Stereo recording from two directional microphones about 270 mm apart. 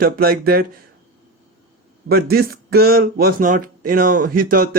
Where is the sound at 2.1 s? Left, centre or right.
Right.